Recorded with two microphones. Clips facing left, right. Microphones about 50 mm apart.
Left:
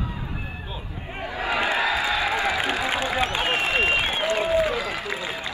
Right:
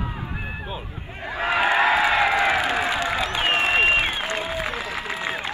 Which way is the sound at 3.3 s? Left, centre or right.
Right.